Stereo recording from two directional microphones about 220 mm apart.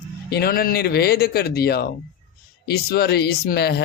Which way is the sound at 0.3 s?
45° left (ahead or behind).